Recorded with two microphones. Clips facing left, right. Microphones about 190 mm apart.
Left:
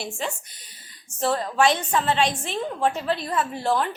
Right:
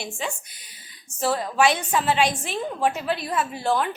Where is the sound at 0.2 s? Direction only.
Centre (ahead or behind).